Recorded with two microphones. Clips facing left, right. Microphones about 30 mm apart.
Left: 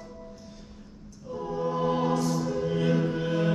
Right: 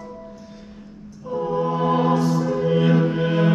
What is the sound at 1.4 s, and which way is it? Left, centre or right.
Music, right.